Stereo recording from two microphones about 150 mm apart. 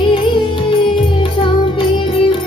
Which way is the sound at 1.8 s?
35° left (ahead or behind).